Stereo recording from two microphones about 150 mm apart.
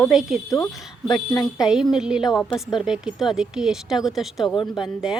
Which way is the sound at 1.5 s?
5° right (ahead or behind).